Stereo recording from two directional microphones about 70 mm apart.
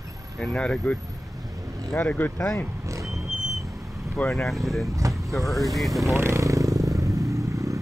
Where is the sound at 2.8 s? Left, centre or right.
Right.